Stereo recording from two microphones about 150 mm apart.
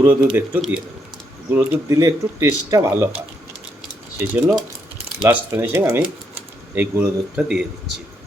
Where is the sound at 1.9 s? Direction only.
20° right (ahead or behind).